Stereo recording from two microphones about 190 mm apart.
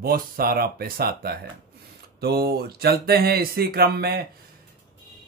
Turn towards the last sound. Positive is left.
turn(degrees=-55)  # may be behind; listen again after turning